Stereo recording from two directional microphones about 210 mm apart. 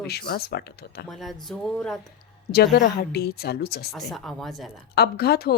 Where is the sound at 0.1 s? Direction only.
50° left (ahead or behind).